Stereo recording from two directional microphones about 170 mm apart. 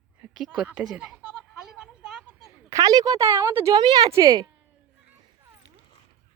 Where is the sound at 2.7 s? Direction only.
20° right (ahead or behind).